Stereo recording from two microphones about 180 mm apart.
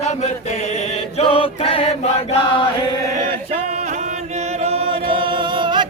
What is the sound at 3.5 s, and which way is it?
Chant, 40° right (ahead or behind).